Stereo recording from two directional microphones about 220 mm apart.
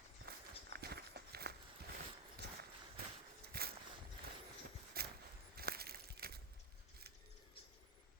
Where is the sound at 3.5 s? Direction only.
45° right (ahead or behind).